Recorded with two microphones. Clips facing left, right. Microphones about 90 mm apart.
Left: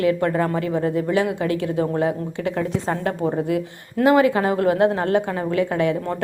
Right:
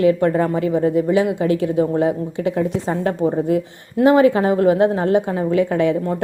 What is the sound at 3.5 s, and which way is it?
A woman's voice, 30° right (ahead or behind).